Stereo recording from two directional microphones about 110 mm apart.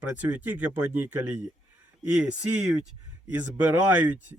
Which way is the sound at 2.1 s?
10° right (ahead or behind).